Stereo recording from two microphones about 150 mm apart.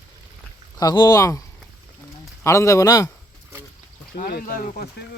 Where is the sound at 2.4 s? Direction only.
20° left (ahead or behind).